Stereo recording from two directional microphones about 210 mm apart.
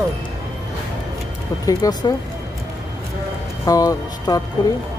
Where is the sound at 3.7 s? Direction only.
15° left (ahead or behind).